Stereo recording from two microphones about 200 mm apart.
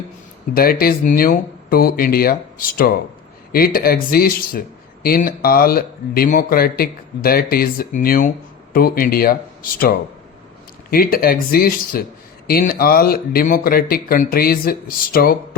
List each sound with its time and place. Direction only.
0.5 s speech: 50° left (ahead or behind)